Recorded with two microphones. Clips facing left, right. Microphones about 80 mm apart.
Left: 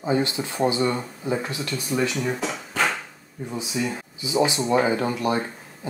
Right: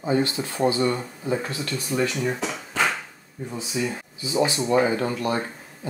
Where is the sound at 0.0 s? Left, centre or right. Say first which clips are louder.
Even; left.